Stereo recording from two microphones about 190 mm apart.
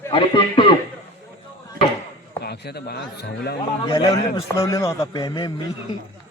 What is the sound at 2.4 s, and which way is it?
Speech, 60° left (ahead or behind).